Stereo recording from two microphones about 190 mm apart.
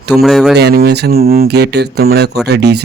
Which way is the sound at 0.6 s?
55° right (ahead or behind).